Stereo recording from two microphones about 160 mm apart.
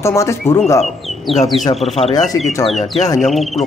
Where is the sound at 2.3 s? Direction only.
20° left (ahead or behind).